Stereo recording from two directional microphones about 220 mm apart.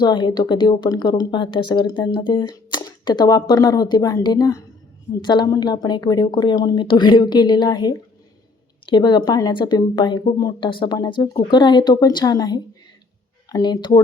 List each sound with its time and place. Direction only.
0.0 s speech: 20° left (ahead or behind)